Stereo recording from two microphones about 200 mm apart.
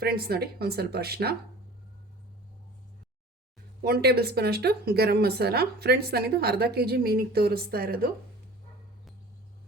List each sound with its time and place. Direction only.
0.0 s speech: 50° right (ahead or behind)
3.8 s speech: 50° right (ahead or behind)